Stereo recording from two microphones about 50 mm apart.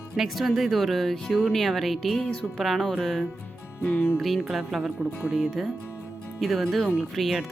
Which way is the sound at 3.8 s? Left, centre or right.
Left.